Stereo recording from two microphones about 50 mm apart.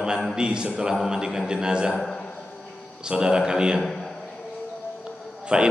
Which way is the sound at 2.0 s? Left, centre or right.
Centre.